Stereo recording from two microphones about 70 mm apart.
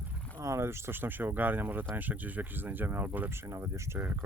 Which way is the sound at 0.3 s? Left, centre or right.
Right.